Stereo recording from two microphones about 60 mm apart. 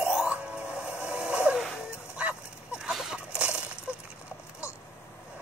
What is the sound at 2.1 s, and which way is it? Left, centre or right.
Dog, centre.